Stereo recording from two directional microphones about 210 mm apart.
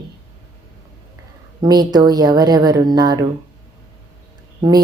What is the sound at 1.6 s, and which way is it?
Speech, 20° right (ahead or behind).